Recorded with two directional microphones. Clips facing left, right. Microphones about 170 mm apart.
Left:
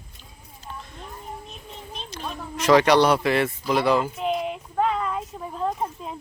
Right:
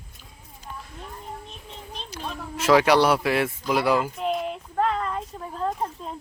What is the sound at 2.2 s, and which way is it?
Speech, centre (ahead or behind).